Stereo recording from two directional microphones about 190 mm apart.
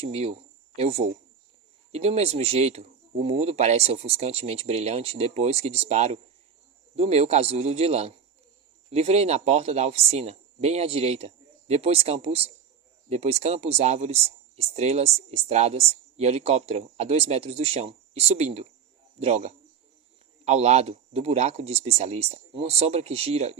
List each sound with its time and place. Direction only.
0.0 s speech: 30° right (ahead or behind)